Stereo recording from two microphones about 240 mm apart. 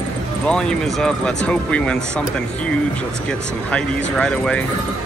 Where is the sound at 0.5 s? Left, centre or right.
Centre.